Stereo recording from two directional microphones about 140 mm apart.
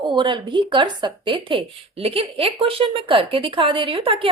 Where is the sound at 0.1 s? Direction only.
35° right (ahead or behind).